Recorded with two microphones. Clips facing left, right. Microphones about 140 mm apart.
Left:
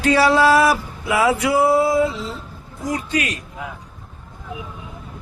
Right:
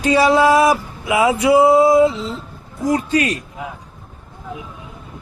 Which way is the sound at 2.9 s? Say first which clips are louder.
Right 6 dB; 35° right (ahead or behind).